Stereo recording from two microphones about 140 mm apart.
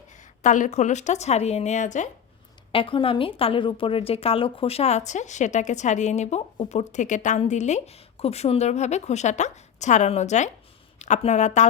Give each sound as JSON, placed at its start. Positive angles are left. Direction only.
{"t": 0.2, "sound": "a woman's voice", "side_deg": 65}
{"t": 2.7, "sound": "a woman's voice", "side_deg": 40}